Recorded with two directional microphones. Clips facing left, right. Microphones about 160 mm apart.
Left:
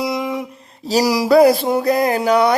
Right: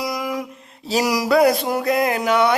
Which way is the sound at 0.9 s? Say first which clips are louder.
Left 4 dB; 35° left (ahead or behind).